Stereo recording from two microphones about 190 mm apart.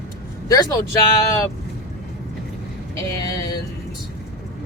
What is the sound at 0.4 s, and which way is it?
Speech, 20° left (ahead or behind).